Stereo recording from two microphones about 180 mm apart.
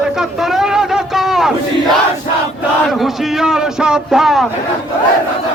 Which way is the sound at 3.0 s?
5° right (ahead or behind).